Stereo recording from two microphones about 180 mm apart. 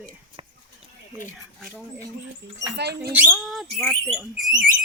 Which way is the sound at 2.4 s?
70° right (ahead or behind).